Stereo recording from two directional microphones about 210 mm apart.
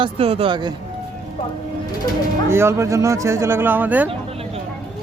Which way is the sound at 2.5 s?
10° right (ahead or behind).